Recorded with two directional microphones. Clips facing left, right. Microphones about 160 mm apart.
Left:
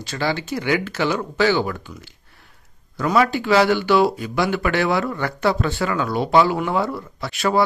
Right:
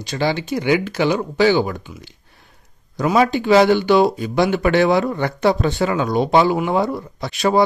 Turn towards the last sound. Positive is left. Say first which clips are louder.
# right 3 dB
turn(degrees=-20)  # may be behind; listen again after turning